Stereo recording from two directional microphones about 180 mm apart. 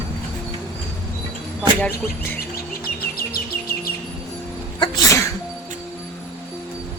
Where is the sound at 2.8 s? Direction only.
55° left (ahead or behind).